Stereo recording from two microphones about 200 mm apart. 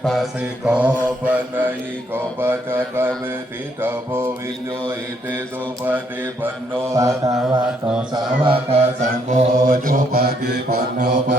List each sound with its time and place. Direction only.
0.0 s mantra: centre (ahead or behind)
6.9 s mantra: 15° right (ahead or behind); by 11.3 s 50° right (ahead or behind)